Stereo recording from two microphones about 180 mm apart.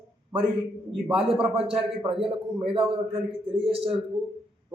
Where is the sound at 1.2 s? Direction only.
5° right (ahead or behind).